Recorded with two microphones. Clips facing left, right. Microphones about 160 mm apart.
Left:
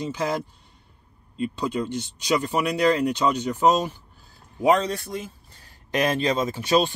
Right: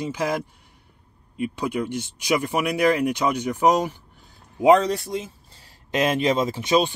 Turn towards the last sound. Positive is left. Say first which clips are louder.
# right 2 dB
turn(degrees=-25)  # may be behind; listen again after turning